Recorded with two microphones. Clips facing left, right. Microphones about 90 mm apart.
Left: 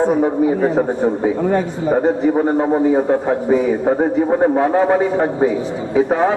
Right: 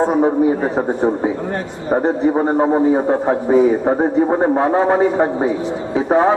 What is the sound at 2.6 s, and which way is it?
A man's voice, 20° right (ahead or behind).